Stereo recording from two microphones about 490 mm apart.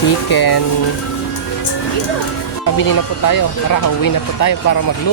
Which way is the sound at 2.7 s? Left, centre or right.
Left.